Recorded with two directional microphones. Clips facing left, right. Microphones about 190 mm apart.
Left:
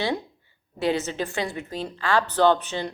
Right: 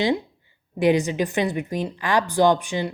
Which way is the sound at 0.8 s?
15° right (ahead or behind).